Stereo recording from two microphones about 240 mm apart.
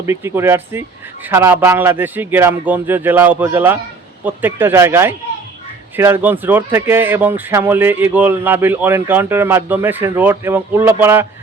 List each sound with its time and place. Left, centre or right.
0.0 s a man's voice: centre